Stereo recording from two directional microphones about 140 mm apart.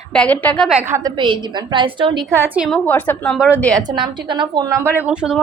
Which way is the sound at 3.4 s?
10° right (ahead or behind).